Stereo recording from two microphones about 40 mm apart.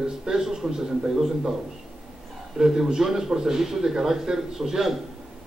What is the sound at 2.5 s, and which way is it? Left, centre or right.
Speech, centre.